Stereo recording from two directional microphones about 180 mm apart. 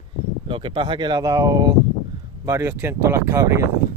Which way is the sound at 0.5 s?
30° right (ahead or behind).